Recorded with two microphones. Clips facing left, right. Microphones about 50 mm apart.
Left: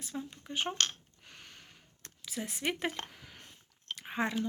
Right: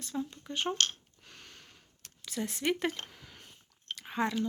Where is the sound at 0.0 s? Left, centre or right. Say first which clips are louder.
Right 4 dB; centre.